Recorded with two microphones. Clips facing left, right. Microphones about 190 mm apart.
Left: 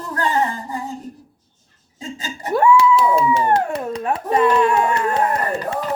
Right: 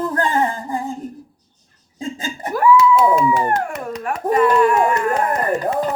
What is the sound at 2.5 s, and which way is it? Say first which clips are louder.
Speech: even; 25° left (ahead or behind).